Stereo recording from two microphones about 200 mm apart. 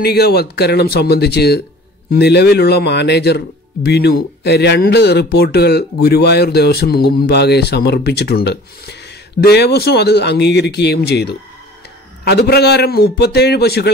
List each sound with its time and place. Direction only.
0.0 s a man's voice: 50° left (ahead or behind)